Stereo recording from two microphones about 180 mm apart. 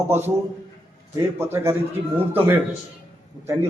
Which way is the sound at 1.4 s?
15° right (ahead or behind).